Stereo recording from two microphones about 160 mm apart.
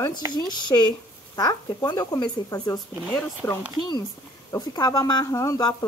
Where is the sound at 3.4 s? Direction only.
15° left (ahead or behind).